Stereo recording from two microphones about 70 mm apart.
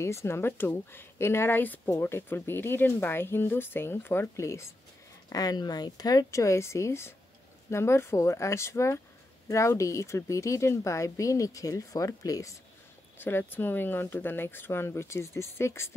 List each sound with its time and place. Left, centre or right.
0.0 s speech: left
4.4 s a woman's voice: left
5.3 s speech: left
6.3 s a woman's voice: left
13.2 s speech: left